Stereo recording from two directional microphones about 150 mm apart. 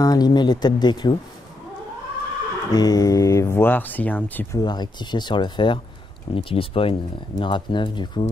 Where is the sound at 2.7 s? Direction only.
25° left (ahead or behind).